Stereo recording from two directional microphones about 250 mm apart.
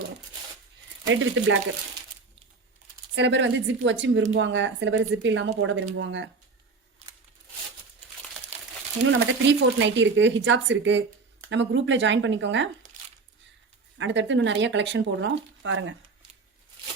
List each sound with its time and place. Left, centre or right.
1.0 s speech: right
3.2 s speech: right
7.0 s a sound: right
9.0 s speech: right
14.0 s speech: right